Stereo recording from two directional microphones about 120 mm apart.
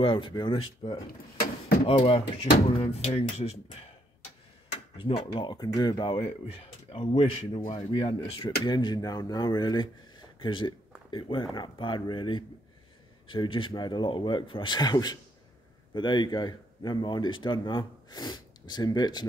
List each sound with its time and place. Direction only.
0.0 s speech: 45° left (ahead or behind)
1.9 s speech: 55° left (ahead or behind)
4.9 s speech: 50° left (ahead or behind)